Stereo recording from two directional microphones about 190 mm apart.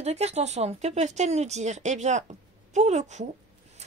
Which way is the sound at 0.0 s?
35° right (ahead or behind).